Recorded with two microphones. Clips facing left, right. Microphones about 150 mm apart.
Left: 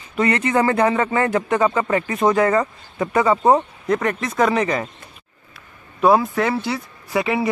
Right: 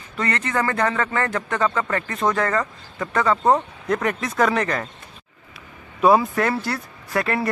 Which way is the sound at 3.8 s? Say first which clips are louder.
Left 2 dB; centre (ahead or behind).